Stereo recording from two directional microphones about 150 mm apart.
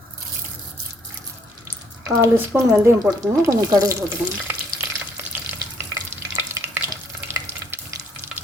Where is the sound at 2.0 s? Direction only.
15° right (ahead or behind).